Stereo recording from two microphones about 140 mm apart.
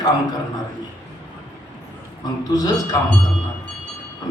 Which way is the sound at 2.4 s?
30° left (ahead or behind).